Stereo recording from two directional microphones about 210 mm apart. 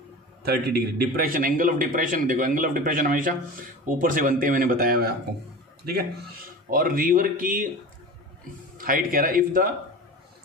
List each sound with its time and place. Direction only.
0.4 s a man's voice: 50° right (ahead or behind)
6.7 s a man's voice: 45° right (ahead or behind)
8.7 s a man's voice: 40° right (ahead or behind)